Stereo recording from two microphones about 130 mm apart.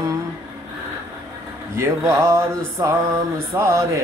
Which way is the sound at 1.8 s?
20° right (ahead or behind).